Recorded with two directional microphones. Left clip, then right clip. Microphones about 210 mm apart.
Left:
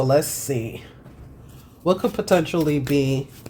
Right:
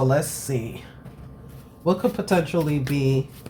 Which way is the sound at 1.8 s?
50° left (ahead or behind).